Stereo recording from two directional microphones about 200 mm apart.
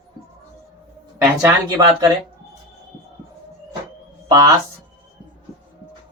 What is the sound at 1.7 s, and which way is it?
Speech, 20° right (ahead or behind).